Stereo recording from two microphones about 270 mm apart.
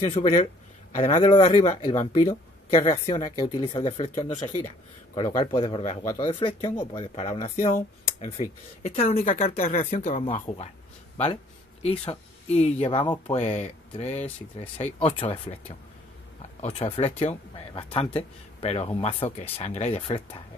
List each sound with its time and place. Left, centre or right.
0.9 s speech: left
11.8 s speech: left
16.6 s speech: left